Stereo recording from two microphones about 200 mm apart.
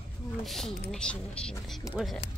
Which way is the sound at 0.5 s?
Centre (ahead or behind).